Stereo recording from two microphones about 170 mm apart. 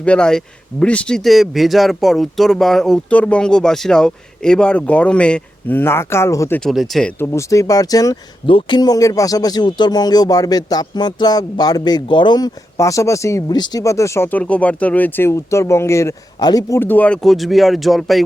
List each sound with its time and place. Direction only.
0.0 s speech: 5° left (ahead or behind)
6.6 s speech: centre (ahead or behind)
7.2 s speech: 20° left (ahead or behind); by 18.2 s centre (ahead or behind)